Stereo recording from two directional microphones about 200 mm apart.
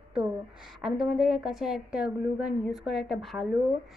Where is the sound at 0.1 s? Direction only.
5° right (ahead or behind).